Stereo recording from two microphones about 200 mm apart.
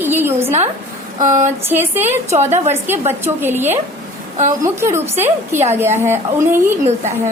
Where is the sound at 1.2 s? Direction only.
40° right (ahead or behind).